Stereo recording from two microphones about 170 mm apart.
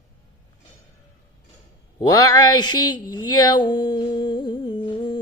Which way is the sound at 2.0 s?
25° left (ahead or behind).